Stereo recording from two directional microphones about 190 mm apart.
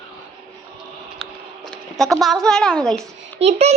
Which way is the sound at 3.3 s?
35° right (ahead or behind).